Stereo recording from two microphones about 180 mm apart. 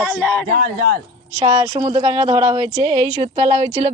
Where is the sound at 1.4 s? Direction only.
25° right (ahead or behind).